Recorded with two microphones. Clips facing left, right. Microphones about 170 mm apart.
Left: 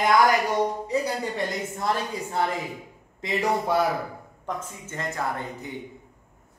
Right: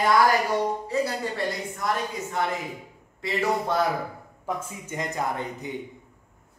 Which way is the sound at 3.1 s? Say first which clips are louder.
Even; 15° left (ahead or behind).